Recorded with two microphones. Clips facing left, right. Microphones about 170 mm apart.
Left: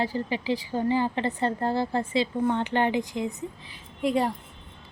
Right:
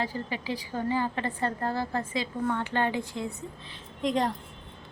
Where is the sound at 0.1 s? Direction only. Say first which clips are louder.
Left 5 dB; 30° left (ahead or behind).